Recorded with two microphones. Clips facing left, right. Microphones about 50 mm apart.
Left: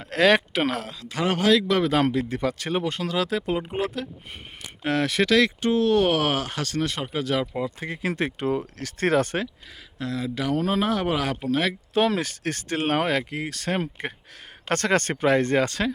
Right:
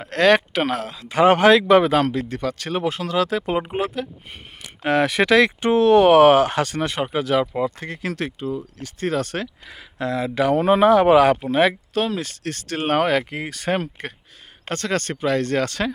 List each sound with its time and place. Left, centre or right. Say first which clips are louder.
0.1 s speech: right 3 dB; centre
1.0 s speech: right 9 dB; right
1.9 s speech: right 2 dB; centre; by 5.7 s right
5.7 s speech: right 7 dB; right
6.1 s speech: right 11 dB; right
7.1 s speech: right 5 dB; centre
7.8 s speech: even; centre
8.4 s speech: left 2 dB; left
9.3 s speech: even; centre
10.0 s speech: right 7 dB; right
12.0 s speech: left 1 dB; left
12.9 s speech: right 6 dB; centre
14.8 s speech: left 1 dB; left
15.5 s speech: even; centre